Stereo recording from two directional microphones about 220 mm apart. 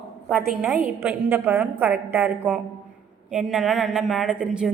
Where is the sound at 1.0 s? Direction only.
5° right (ahead or behind).